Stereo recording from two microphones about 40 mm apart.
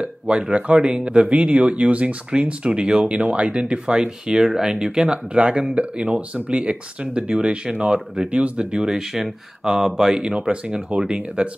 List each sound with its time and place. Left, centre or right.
0.0 s speech: right
0.7 s speech: right
1.2 s speech: right
7.3 s speech: centre
7.7 s speech: right
8.8 s speech: centre
10.2 s speech: right